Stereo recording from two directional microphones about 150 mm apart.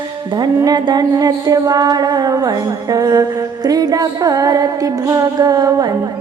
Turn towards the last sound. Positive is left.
turn(degrees=-25)  # may be behind; listen again after turning